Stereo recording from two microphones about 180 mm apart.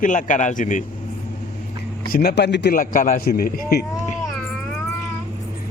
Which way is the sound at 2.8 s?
45° left (ahead or behind).